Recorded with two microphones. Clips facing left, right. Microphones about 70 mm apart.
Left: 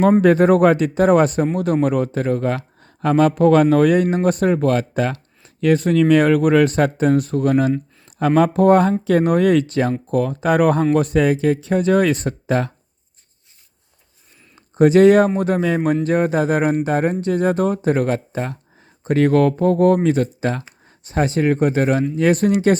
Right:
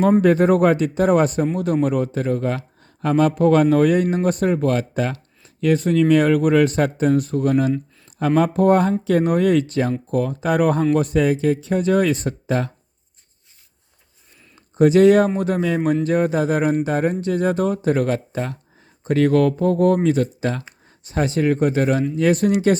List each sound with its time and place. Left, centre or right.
0.2 s speech: left
14.8 s speech: left